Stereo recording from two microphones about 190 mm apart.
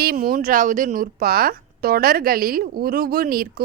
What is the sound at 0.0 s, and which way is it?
Speech, 50° right (ahead or behind).